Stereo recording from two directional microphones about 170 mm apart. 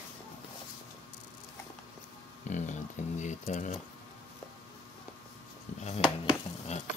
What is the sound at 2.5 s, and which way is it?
Speech, 45° left (ahead or behind).